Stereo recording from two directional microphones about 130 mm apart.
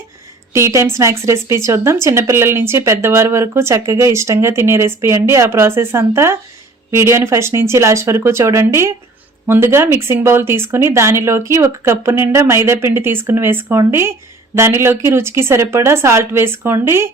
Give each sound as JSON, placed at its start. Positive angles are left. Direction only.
{"t": 0.5, "sound": "speech", "side_deg": -20}